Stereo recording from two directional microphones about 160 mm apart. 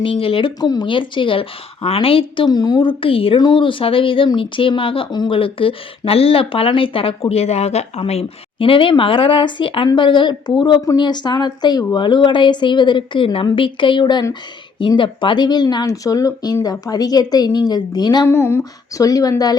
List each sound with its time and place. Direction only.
0.0 s speech: 35° left (ahead or behind)
18.3 s speech: 15° left (ahead or behind)